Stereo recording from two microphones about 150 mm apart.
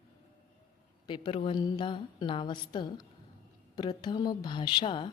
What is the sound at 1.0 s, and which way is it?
A woman's voice, 30° left (ahead or behind).